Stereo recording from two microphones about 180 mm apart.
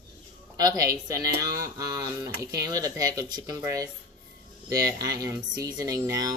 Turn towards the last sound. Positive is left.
turn(degrees=-20)  # may be behind; listen again after turning